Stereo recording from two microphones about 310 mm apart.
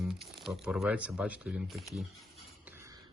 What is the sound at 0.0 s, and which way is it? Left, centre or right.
Speech, centre.